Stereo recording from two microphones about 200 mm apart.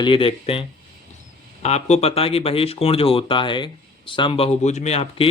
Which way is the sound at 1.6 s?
35° left (ahead or behind).